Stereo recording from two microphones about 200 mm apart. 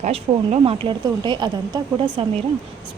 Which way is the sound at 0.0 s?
30° right (ahead or behind).